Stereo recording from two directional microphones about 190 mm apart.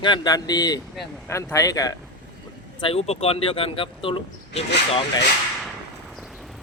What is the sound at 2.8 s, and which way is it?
Speech, 30° left (ahead or behind).